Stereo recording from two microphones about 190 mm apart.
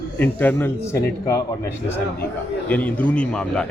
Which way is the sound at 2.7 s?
10° left (ahead or behind).